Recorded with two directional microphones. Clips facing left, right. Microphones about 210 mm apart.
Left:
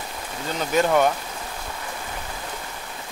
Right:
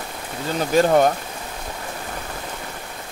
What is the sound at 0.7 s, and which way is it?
Speech, 35° right (ahead or behind).